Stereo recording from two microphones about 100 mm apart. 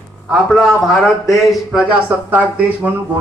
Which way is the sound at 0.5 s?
Centre (ahead or behind).